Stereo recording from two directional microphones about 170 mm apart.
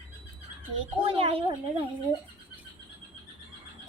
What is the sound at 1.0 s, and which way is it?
Speech, 35° right (ahead or behind).